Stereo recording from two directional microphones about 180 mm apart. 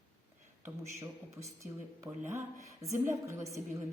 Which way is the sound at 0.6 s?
15° right (ahead or behind).